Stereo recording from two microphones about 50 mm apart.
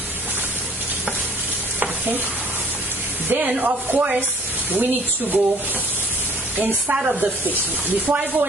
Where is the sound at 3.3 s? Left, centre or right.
Right.